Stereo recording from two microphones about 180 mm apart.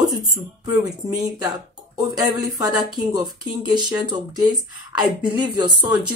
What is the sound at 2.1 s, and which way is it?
Speech, 20° right (ahead or behind).